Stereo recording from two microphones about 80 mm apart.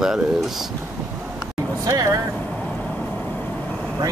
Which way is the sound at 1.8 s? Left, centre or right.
Right.